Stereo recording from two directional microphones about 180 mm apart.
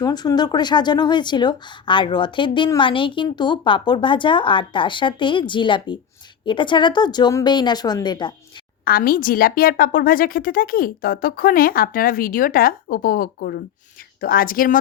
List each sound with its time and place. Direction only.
0.0 s speech: 20° left (ahead or behind)
8.8 s a woman's voice: 55° left (ahead or behind)